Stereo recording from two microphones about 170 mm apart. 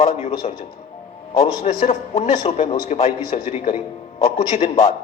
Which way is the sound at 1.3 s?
55° left (ahead or behind).